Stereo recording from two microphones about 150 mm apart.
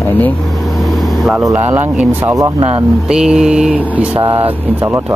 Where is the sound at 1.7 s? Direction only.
10° right (ahead or behind).